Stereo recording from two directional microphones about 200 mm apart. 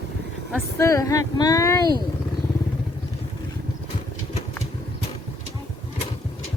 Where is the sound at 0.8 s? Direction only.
15° left (ahead or behind).